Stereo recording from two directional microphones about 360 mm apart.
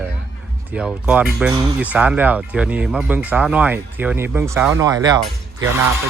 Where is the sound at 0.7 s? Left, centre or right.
Centre.